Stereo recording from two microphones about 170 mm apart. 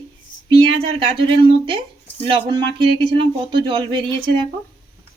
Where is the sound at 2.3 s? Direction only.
35° right (ahead or behind).